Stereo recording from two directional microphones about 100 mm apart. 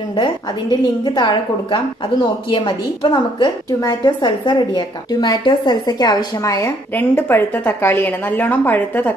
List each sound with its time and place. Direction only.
0.1 s a woman's voice: 55° left (ahead or behind)
3.8 s a woman's voice: 40° left (ahead or behind)
4.3 s a woman's voice: 50° left (ahead or behind); by 6.7 s 35° left (ahead or behind)
7.0 s a woman's voice: 20° left (ahead or behind)